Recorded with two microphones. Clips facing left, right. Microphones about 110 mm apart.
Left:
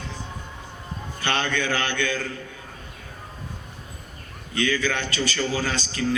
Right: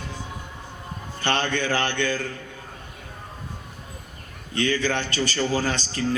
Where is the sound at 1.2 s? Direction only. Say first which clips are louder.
Right 1 dB; 35° right (ahead or behind).